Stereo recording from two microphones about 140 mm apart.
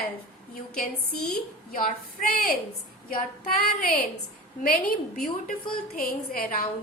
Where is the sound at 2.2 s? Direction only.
90° left.